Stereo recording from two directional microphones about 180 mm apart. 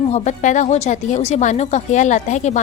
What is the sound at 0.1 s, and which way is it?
A woman's voice, 40° left (ahead or behind).